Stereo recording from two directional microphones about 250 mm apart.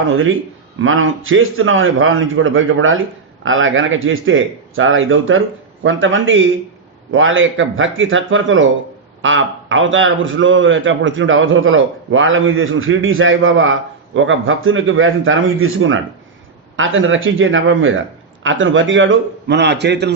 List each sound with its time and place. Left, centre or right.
0.0 s a man's voice: right